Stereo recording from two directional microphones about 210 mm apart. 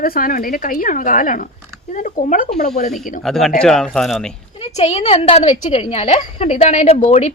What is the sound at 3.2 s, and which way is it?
Speech, centre (ahead or behind).